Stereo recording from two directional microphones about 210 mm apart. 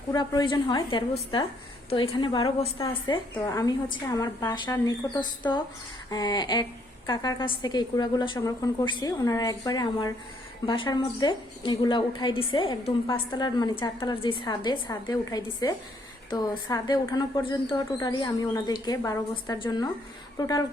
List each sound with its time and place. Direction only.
0.1 s a woman's voice: 20° left (ahead or behind)